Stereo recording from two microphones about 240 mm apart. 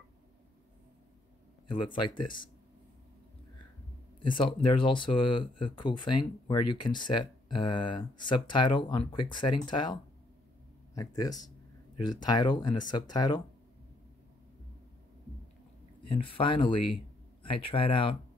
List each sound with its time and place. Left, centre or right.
1.7 s speech: left
4.2 s speech: left
11.0 s speech: centre
16.1 s speech: left